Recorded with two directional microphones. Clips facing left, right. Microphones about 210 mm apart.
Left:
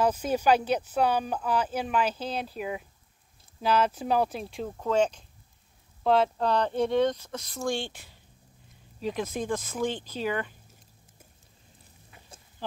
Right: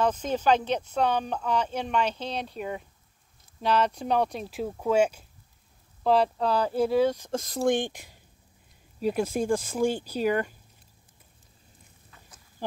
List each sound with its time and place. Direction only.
0.0 s speech: 10° left (ahead or behind); by 7.2 s 5° right (ahead or behind)
7.2 s speech: 40° right (ahead or behind)
7.6 s speech: 15° right (ahead or behind)
10.2 s speech: 45° right (ahead or behind)